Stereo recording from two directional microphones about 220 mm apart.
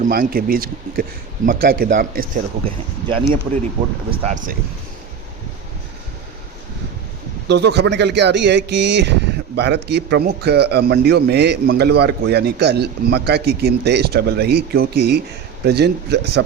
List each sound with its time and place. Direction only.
0.0 s a man's voice: 40° right (ahead or behind)
2.6 s speech: 25° right (ahead or behind)
4.1 s a man's voice: 35° right (ahead or behind)
7.4 s speech: 50° right (ahead or behind)